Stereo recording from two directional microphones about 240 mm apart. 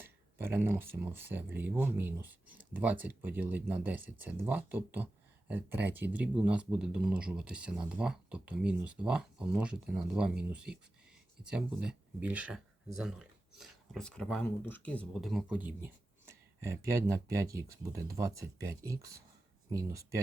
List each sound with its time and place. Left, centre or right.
0.0 s speech: centre